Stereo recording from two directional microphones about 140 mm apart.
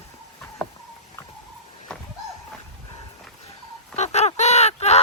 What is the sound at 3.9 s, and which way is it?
Fowl, 50° left (ahead or behind).